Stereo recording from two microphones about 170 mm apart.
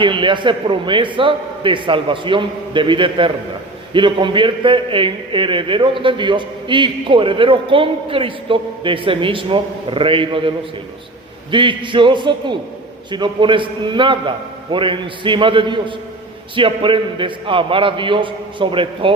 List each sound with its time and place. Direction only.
0.0 s a man's voice: 30° right (ahead or behind)
11.5 s a man's voice: 30° right (ahead or behind)